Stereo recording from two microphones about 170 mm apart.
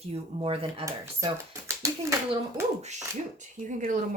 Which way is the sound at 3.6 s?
45° right (ahead or behind).